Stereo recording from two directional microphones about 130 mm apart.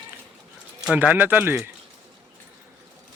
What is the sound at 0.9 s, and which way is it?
Speech, 10° right (ahead or behind).